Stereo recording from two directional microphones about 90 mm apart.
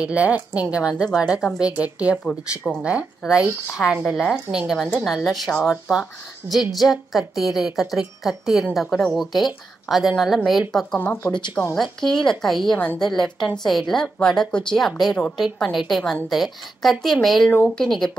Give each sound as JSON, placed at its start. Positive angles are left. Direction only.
{"t": 0.0, "sound": "speech", "side_deg": -15}
{"t": 2.2, "sound": "speech", "side_deg": 10}
{"t": 2.8, "sound": "a woman's voice", "side_deg": -10}
{"t": 11.0, "sound": "a woman's voice", "side_deg": 20}
{"t": 12.7, "sound": "speech", "side_deg": 15}
{"t": 13.0, "sound": "a woman's voice", "side_deg": 5}